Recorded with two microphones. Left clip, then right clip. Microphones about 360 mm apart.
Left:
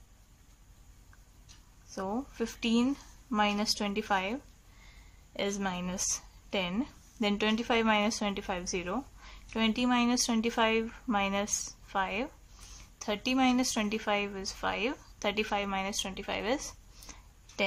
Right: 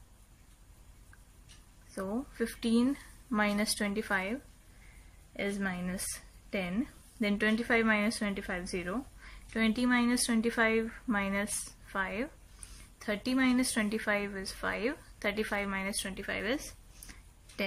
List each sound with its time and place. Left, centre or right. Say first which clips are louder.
1.9 s a woman's voice: left 2 dB; centre